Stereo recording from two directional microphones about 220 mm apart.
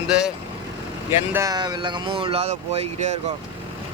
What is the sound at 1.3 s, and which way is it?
Speech, 15° right (ahead or behind).